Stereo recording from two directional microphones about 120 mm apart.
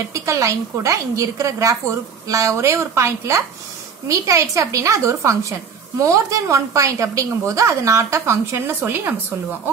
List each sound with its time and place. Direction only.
0.1 s a woman's voice: 25° right (ahead or behind)